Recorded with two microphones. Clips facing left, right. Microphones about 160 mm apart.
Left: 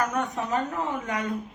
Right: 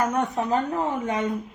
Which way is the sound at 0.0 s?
30° right (ahead or behind).